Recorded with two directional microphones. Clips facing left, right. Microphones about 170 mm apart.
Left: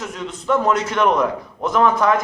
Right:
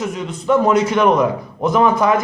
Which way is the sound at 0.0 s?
5° right (ahead or behind).